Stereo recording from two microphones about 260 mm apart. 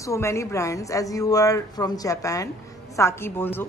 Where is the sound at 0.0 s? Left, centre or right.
Centre.